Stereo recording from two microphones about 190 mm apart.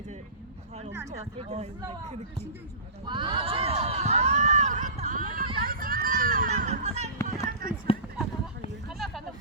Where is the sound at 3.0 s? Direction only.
25° right (ahead or behind).